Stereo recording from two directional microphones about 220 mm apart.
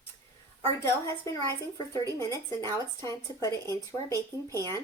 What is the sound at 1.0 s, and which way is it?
Speech, 15° left (ahead or behind).